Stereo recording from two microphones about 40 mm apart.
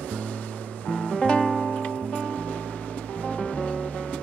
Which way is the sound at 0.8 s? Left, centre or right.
Left.